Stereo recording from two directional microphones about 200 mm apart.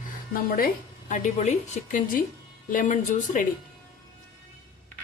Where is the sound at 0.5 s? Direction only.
40° left (ahead or behind).